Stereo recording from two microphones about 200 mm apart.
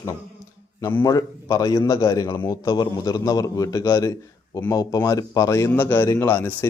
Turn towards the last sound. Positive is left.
turn(degrees=10)  # may be behind; listen again after turning